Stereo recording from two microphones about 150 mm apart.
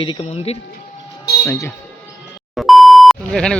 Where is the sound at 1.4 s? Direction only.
15° left (ahead or behind).